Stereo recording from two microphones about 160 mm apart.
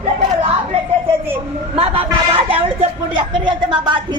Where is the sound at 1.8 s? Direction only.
35° right (ahead or behind).